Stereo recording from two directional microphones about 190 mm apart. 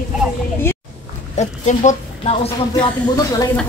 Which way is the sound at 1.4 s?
35° left (ahead or behind).